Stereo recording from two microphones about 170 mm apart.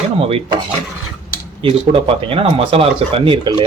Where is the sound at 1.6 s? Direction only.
30° right (ahead or behind).